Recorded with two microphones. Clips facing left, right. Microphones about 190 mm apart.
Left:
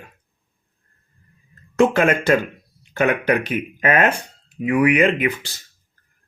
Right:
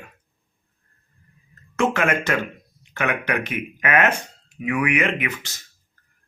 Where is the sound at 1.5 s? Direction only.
35° left (ahead or behind).